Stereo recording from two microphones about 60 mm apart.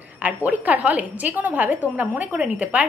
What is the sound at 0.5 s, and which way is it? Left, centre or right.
A woman's voice, right.